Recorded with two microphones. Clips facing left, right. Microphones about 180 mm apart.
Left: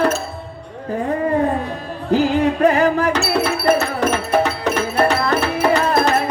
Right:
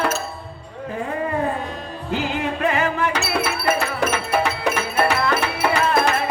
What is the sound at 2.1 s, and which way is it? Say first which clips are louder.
Music: left 8 dB; 40° left (ahead or behind).